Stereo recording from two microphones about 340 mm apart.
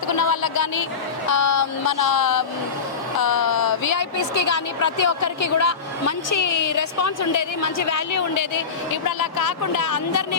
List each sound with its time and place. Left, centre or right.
0.2 s a sound: left
1.3 s a woman's voice: left
4.8 s a woman's voice: left
9.0 s speech: left